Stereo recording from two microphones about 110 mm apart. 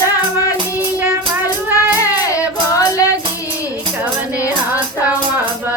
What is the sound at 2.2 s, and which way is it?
Music, 30° left (ahead or behind).